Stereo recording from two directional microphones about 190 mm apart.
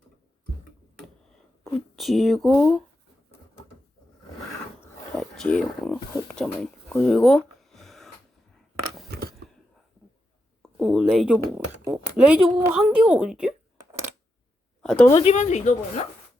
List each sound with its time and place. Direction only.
1.6 s speech: centre (ahead or behind)
5.1 s speech: 5° left (ahead or behind)
7.0 s a sound: centre (ahead or behind)
10.6 s a woman's voice: centre (ahead or behind)
14.8 s a woman's voice: 5° left (ahead or behind)
15.2 s speech: 35° left (ahead or behind)